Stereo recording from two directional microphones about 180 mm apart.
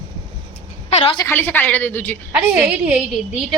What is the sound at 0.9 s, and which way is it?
Speech, 30° left (ahead or behind).